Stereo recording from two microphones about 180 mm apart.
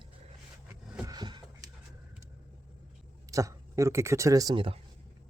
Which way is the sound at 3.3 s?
15° right (ahead or behind).